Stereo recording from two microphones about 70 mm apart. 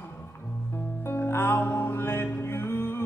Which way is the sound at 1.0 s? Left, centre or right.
Left.